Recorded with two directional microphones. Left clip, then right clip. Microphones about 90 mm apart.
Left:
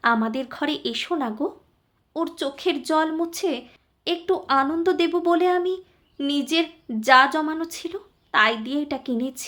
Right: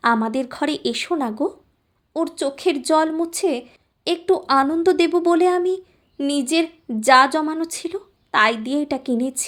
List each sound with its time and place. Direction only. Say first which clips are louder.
0.0 s a woman's voice: right 3 dB; 50° right (ahead or behind)
2.1 s a woman's voice: right 4 dB; 35° right (ahead or behind)